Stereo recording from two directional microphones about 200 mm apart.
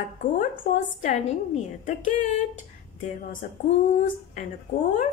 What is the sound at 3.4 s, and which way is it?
Speech, 40° left (ahead or behind).